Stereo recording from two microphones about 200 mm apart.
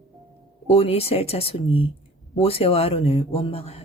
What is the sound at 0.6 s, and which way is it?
Speech, 30° left (ahead or behind).